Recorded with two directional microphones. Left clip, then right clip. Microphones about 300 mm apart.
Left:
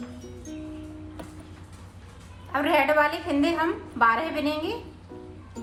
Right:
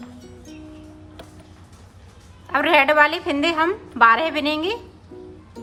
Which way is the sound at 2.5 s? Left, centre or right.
Centre.